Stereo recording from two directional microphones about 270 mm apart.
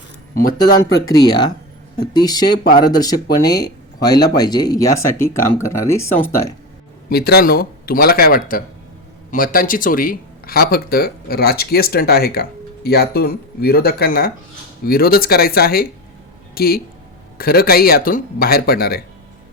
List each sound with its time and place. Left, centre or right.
0.7 s speech: left
1.0 s speech: centre
7.1 s speech: left